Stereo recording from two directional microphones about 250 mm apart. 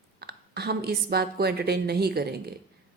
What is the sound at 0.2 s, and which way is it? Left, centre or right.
A woman's voice, right.